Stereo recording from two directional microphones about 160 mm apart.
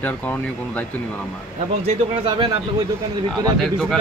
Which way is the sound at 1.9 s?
30° right (ahead or behind).